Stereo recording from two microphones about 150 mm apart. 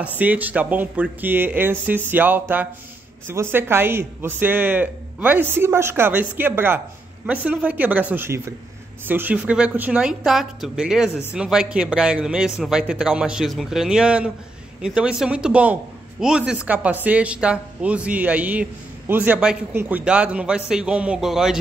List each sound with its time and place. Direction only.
0.0 s a man's voice: 10° right (ahead or behind)